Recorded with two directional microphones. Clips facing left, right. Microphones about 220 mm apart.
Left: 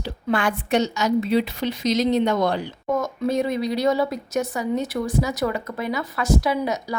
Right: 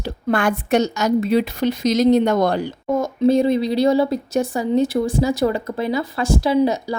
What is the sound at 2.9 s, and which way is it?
Speech, 30° right (ahead or behind).